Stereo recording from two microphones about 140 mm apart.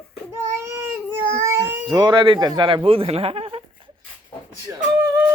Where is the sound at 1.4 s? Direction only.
20° right (ahead or behind).